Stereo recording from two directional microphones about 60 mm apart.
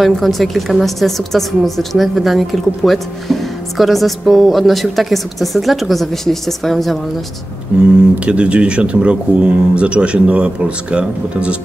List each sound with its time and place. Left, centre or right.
0.0 s a woman's voice: centre
7.7 s speech: centre